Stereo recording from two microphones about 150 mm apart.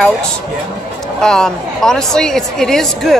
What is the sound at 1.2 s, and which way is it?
Speech, 5° left (ahead or behind).